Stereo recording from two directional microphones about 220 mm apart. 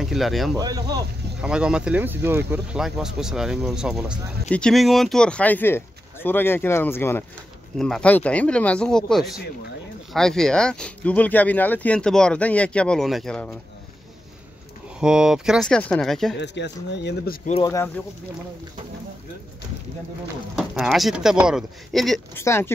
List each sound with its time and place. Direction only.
0.0 s speech: centre (ahead or behind)
0.6 s speech: 15° right (ahead or behind)
1.4 s speech: 5° right (ahead or behind)
15.0 s speech: 5° right (ahead or behind)
16.3 s speech: 50° left (ahead or behind)
20.5 s speech: centre (ahead or behind)
22.4 s speech: 10° left (ahead or behind)